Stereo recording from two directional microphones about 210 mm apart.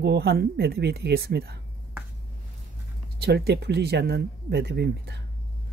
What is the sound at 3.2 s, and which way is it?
Speech, 50° right (ahead or behind).